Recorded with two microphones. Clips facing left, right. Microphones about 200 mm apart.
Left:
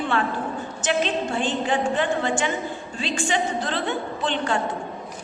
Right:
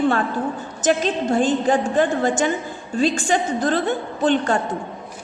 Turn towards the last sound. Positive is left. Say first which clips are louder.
# right 6 dB
turn(degrees=-45)  # may be behind; listen again after turning